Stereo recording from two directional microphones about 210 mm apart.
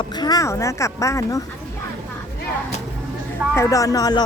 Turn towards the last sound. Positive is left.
turn(degrees=15)  # may be behind; listen again after turning